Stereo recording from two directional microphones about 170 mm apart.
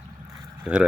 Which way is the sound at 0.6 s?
5° right (ahead or behind).